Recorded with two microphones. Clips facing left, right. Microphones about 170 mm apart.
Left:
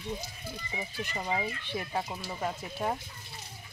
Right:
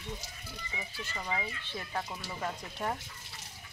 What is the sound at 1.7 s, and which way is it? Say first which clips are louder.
Speech: left 4 dB; 15° left (ahead or behind).